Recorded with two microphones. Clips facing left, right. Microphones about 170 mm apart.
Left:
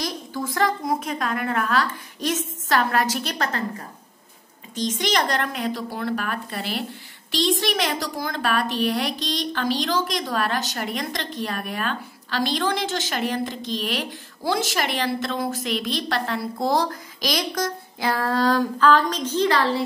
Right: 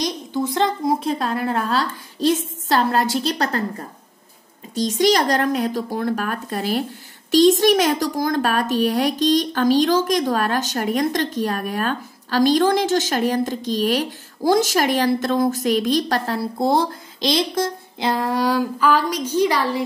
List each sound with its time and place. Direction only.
0.0 s a woman's voice: 25° right (ahead or behind)
4.7 s a child's voice: 40° right (ahead or behind); by 19.8 s 15° right (ahead or behind)